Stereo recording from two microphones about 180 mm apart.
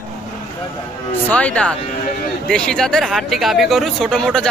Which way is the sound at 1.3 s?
10° left (ahead or behind).